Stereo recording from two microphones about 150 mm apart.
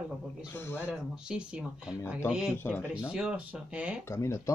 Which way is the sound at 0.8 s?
5° right (ahead or behind).